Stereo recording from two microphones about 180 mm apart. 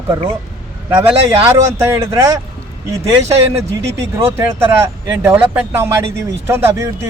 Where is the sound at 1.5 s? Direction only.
15° right (ahead or behind).